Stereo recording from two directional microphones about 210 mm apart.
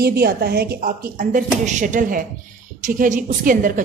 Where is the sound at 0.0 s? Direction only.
45° right (ahead or behind).